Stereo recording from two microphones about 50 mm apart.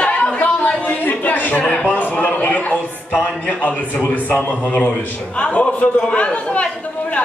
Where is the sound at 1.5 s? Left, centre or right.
Left.